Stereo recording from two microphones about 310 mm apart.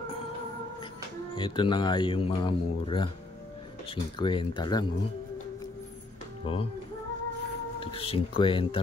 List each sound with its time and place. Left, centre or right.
1.3 s speech: centre
6.4 s speech: centre
7.8 s speech: centre